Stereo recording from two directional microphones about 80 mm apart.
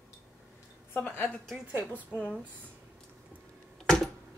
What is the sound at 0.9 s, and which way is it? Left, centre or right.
Speech, left.